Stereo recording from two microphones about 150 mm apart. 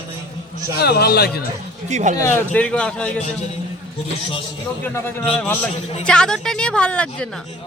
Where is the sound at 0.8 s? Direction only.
90° left.